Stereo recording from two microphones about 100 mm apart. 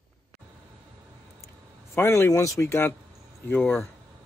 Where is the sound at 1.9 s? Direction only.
20° left (ahead or behind).